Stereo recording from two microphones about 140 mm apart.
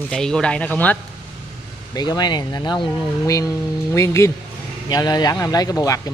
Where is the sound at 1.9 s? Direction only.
30° left (ahead or behind).